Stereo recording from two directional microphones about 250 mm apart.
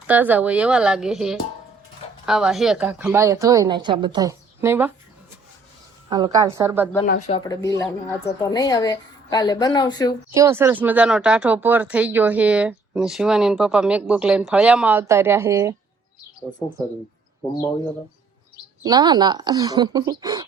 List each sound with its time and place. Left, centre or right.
0.1 s a woman's voice: centre
6.1 s a woman's voice: centre
7.3 s a woman's voice: centre
10.3 s speech: centre
18.8 s a woman's voice: centre